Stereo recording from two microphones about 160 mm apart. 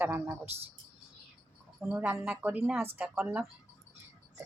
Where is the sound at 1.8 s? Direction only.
10° right (ahead or behind).